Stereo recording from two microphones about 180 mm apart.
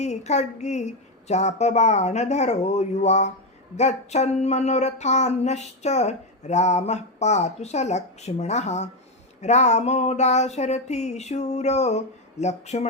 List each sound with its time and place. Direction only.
0.0 s speech: 40° left (ahead or behind)